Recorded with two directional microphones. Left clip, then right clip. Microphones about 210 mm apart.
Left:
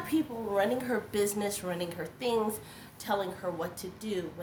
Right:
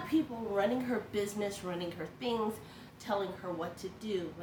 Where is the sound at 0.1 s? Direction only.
50° left (ahead or behind).